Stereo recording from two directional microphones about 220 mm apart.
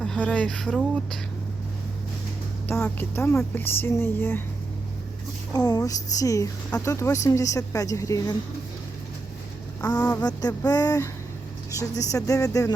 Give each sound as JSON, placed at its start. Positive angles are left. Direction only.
{"t": 0.0, "sound": "speech", "side_deg": 5}
{"t": 2.6, "sound": "speech", "side_deg": 10}
{"t": 5.5, "sound": "speech", "side_deg": 15}
{"t": 9.8, "sound": "speech", "side_deg": 10}